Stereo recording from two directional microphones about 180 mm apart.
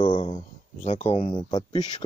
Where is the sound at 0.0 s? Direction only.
30° left (ahead or behind).